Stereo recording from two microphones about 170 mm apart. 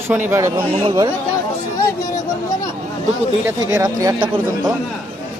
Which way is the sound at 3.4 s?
15° right (ahead or behind).